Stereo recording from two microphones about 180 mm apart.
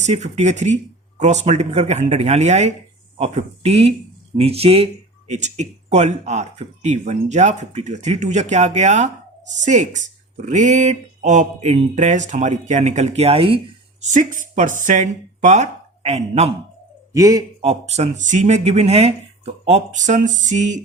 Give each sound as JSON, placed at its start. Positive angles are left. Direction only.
{"t": 0.0, "sound": "speech", "side_deg": -40}
{"t": 14.0, "sound": "speech", "side_deg": -45}
{"t": 17.1, "sound": "a man's voice", "side_deg": -20}
{"t": 17.6, "sound": "speech", "side_deg": -35}